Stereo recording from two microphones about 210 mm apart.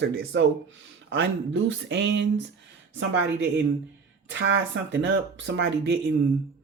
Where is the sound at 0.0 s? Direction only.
55° right (ahead or behind).